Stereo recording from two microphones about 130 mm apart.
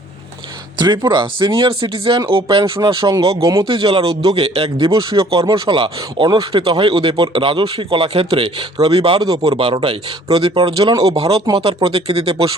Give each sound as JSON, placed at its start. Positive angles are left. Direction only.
{"t": 0.8, "sound": "speech", "side_deg": -35}
{"t": 3.7, "sound": "speech", "side_deg": -40}
{"t": 4.4, "sound": "speech", "side_deg": -50}
{"t": 4.9, "sound": "speech", "side_deg": -30}